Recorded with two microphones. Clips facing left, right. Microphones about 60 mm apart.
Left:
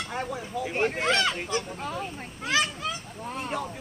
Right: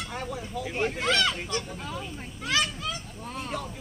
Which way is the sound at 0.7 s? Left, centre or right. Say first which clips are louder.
Left 2 dB; left.